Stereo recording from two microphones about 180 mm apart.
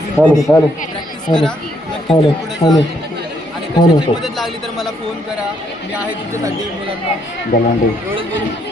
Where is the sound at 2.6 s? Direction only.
30° left (ahead or behind).